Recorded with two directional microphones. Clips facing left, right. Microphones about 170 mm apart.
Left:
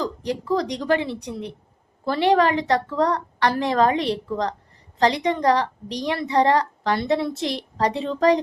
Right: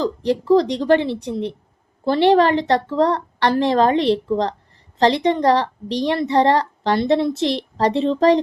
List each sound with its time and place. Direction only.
0.5 s a woman's voice: 30° right (ahead or behind)